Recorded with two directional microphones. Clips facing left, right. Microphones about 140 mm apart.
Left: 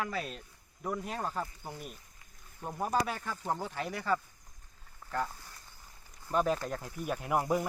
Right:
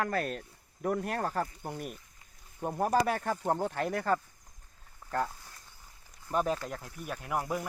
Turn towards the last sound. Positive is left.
turn(degrees=10)  # may be behind; listen again after turning